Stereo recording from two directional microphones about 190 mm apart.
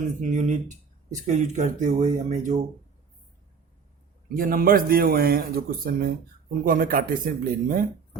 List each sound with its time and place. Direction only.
0.2 s speech: 40° right (ahead or behind)
4.4 s speech: 50° right (ahead or behind)